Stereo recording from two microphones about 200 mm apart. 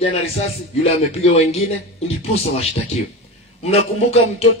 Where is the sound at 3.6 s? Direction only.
30° left (ahead or behind).